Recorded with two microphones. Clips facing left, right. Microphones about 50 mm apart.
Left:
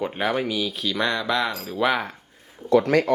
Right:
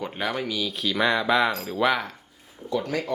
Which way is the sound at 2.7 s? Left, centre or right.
Left.